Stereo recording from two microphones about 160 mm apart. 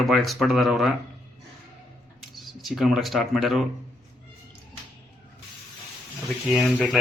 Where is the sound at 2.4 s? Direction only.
Centre (ahead or behind).